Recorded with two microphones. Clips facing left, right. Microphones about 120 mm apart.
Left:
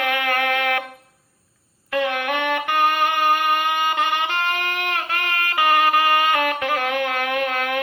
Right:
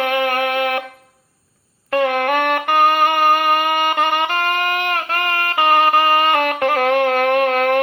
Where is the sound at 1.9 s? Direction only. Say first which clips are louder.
Right 5 dB; 45° right (ahead or behind).